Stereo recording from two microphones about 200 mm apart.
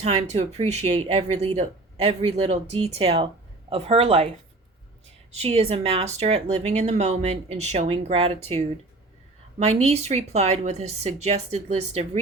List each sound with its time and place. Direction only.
0.0 s a woman's voice: 35° right (ahead or behind)
5.3 s speech: 30° right (ahead or behind)